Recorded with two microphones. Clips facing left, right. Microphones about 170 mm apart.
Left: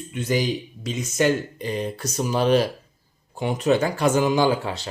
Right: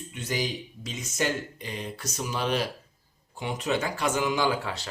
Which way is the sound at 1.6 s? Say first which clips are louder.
Left 9 dB; 40° left (ahead or behind).